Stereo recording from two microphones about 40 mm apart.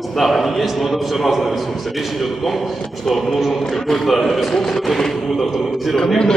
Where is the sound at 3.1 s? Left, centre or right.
Centre.